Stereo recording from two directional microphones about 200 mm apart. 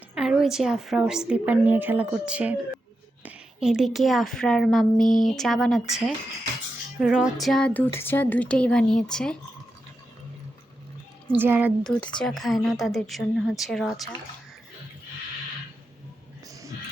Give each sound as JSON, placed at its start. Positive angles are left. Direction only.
{"t": 0.1, "sound": "speech", "side_deg": -5}
{"t": 11.3, "sound": "speech", "side_deg": -10}
{"t": 12.2, "sound": "speech", "side_deg": 0}
{"t": 16.5, "sound": "a sound", "side_deg": -15}